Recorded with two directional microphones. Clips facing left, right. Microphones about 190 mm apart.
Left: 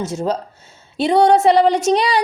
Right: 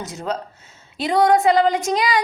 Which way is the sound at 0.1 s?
30° left (ahead or behind).